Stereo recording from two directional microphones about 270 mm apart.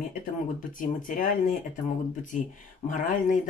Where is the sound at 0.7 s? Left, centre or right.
Left.